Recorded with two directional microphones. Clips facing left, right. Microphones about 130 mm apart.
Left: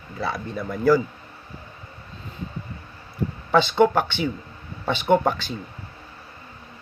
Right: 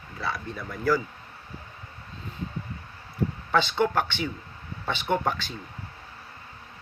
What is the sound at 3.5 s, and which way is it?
Speech, 15° left (ahead or behind).